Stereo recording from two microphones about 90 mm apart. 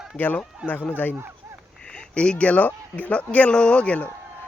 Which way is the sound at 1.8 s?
10° left (ahead or behind).